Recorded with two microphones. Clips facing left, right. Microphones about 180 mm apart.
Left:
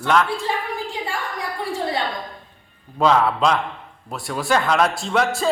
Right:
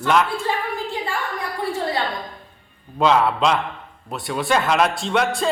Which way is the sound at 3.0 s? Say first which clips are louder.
Even; centre (ahead or behind).